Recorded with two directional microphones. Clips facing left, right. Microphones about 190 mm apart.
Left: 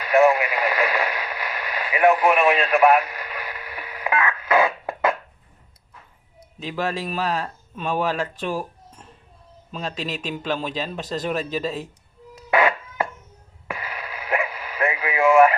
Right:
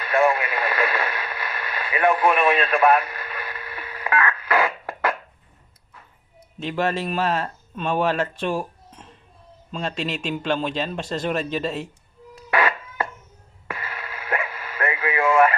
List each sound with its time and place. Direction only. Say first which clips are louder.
0.3 s radio: left 2 dB; 15° left (ahead or behind)
6.6 s speech: right 2 dB; centre (ahead or behind)
12.5 s music: left 3 dB; 20° left (ahead or behind)
13.7 s radio: left 1 dB; 15° left (ahead or behind)